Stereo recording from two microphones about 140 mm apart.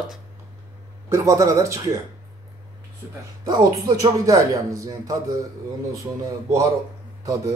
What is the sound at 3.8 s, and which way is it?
Speech, 25° right (ahead or behind).